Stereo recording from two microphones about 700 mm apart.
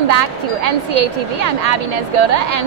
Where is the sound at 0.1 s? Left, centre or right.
Right.